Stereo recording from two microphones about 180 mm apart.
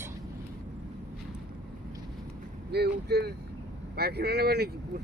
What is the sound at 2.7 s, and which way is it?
Speech, 65° right (ahead or behind).